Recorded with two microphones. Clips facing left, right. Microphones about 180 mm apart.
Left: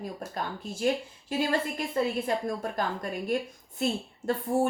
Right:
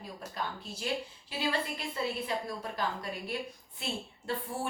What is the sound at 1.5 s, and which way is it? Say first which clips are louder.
A woman's voice: left 6 dB; 45° left (ahead or behind).